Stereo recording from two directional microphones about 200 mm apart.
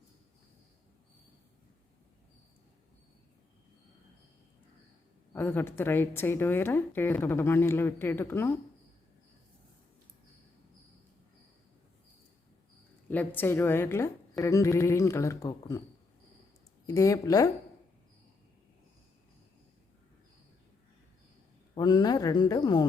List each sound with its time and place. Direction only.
5.3 s speech: 10° left (ahead or behind)
13.1 s speech: 10° left (ahead or behind)
16.8 s speech: 15° left (ahead or behind)
21.8 s speech: 20° left (ahead or behind)